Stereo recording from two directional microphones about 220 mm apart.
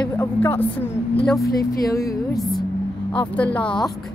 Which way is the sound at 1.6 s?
15° left (ahead or behind).